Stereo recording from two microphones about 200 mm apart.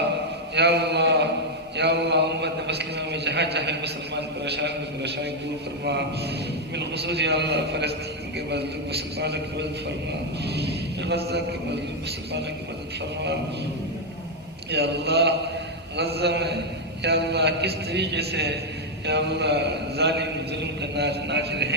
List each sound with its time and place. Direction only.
0.5 s a sound: 60° right (ahead or behind)
1.7 s a man's voice: 60° right (ahead or behind)
6.7 s a man's voice: 55° right (ahead or behind)
14.7 s a man's voice: 55° right (ahead or behind)